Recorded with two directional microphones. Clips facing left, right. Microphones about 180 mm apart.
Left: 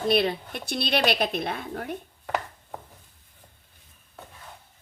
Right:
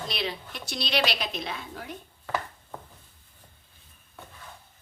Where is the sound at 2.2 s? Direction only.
15° left (ahead or behind).